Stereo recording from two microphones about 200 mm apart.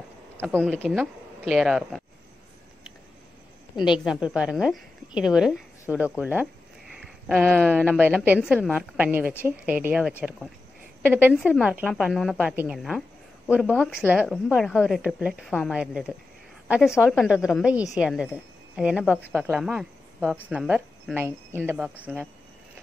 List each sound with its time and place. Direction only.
0.6 s a woman's voice: centre (ahead or behind)
3.7 s a woman's voice: 25° left (ahead or behind)
4.0 s a woman's voice: 5° right (ahead or behind)